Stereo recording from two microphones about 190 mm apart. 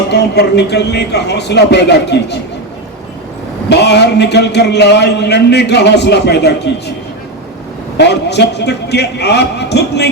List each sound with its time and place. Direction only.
0.1 s a man's voice: 60° left (ahead or behind)
3.7 s a man's voice: 60° left (ahead or behind)
7.9 s a man's voice: 65° left (ahead or behind)